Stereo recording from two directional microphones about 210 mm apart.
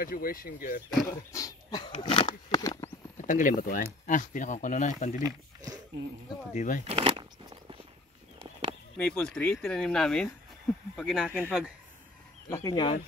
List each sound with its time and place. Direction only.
0.0 s speech: 45° left (ahead or behind)
1.0 s speech: 15° left (ahead or behind)
3.2 s speech: 40° left (ahead or behind)
5.2 s a sound: 15° right (ahead or behind)
6.5 s speech: 35° left (ahead or behind)
6.9 s a sound: 25° right (ahead or behind)
8.9 s speech: 5° left (ahead or behind)
12.4 s speech: 15° left (ahead or behind)